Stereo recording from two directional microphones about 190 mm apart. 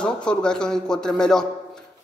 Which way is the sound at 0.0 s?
5° left (ahead or behind).